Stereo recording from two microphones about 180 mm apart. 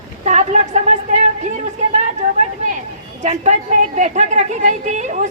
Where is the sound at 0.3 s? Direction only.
40° right (ahead or behind).